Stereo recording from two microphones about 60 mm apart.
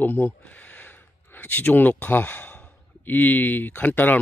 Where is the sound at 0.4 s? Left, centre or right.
Left.